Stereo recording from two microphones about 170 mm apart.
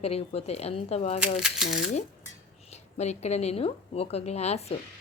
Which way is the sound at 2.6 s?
40° left (ahead or behind).